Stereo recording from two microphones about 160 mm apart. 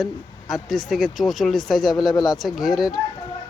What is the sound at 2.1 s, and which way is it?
Speech, 25° left (ahead or behind).